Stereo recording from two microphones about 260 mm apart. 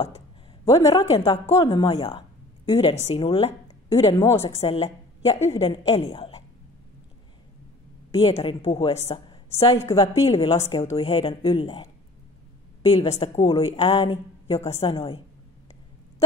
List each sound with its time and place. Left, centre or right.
0.7 s speech: centre
4.4 s speech: left
8.1 s speech: centre
10.6 s speech: centre